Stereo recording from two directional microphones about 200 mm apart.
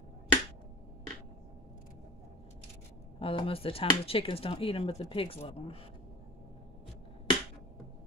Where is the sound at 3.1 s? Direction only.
25° left (ahead or behind).